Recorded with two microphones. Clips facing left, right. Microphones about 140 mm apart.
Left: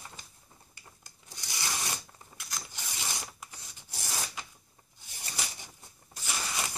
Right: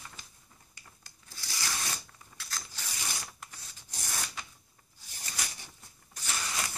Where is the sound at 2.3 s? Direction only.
15° left (ahead or behind).